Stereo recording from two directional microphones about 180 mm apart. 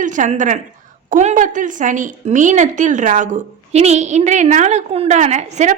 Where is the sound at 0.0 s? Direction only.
45° right (ahead or behind).